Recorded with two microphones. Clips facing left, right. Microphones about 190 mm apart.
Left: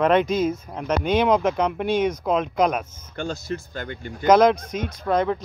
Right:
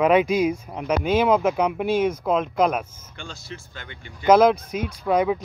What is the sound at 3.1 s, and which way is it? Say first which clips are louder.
Speech: left 10 dB; 45° left (ahead or behind).